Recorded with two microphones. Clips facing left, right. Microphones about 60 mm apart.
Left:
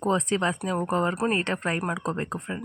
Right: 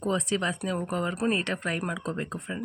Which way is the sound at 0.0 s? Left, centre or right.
Left.